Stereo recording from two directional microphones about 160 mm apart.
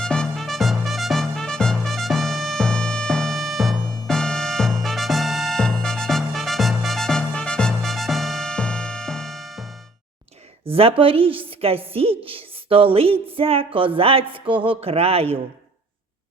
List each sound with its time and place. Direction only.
0.0 s music: 5° left (ahead or behind)
10.7 s a woman's voice: 35° right (ahead or behind)